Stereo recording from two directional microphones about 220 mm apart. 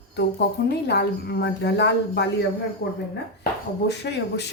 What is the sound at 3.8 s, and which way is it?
Speech, 50° left (ahead or behind).